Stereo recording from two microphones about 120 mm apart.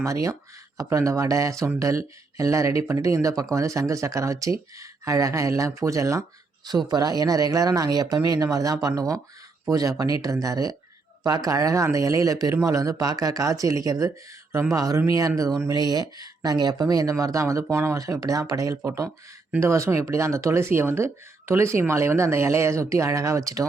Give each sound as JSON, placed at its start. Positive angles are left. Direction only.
{"t": 0.0, "sound": "speech", "side_deg": -25}